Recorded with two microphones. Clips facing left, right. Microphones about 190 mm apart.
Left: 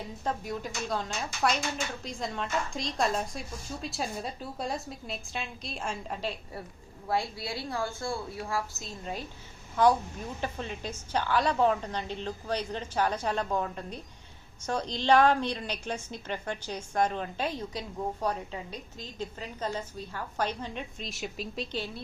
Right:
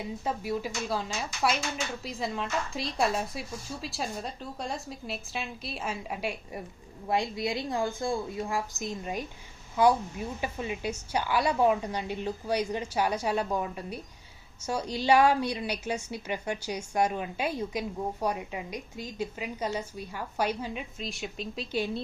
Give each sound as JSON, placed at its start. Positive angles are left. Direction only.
{"t": 0.0, "sound": "a woman's voice", "side_deg": -5}